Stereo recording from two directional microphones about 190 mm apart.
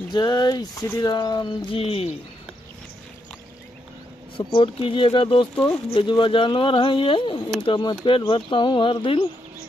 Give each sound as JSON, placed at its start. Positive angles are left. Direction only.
{"t": 0.1, "sound": "speech", "side_deg": 25}
{"t": 4.4, "sound": "speech", "side_deg": 25}